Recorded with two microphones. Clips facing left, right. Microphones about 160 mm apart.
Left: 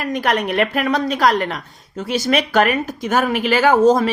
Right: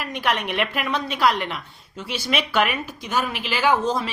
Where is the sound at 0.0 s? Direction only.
40° left (ahead or behind).